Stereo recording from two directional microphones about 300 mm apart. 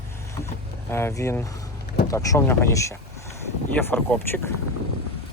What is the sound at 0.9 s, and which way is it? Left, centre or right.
Speech, centre.